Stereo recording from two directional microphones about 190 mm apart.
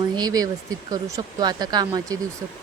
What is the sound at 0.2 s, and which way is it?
Speech, 20° right (ahead or behind).